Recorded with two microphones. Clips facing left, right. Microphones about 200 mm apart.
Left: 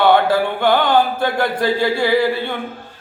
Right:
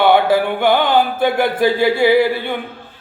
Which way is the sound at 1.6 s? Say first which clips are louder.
Right 4 dB; 20° right (ahead or behind).